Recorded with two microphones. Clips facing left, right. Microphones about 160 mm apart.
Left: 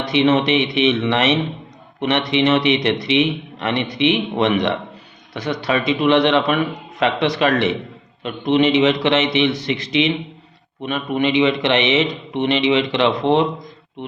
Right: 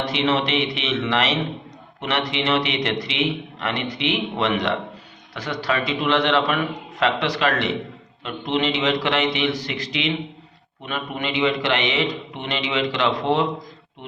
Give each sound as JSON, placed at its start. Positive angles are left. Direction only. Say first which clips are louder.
{"t": 0.1, "sound": "a man's voice", "louder": "left 9 dB", "side_deg": 20}